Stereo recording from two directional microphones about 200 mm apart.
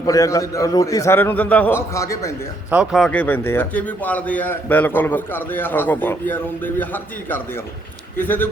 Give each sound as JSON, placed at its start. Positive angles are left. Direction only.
{"t": 0.0, "sound": "a man's voice", "side_deg": 15}
{"t": 2.6, "sound": "a man's voice", "side_deg": -5}